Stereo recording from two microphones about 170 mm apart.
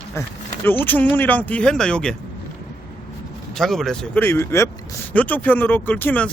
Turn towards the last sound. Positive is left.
turn(degrees=10)  # may be behind; listen again after turning